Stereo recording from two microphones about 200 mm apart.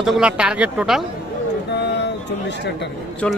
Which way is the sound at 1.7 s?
60° left (ahead or behind).